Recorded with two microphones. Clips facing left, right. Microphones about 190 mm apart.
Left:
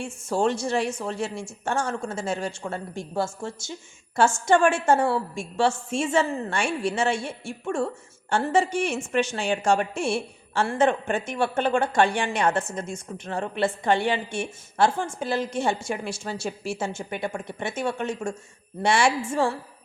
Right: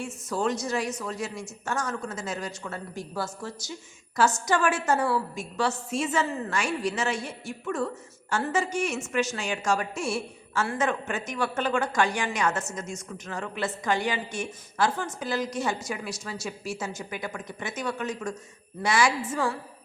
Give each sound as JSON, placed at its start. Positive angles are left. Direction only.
{"t": 0.0, "sound": "a woman's voice", "side_deg": 30}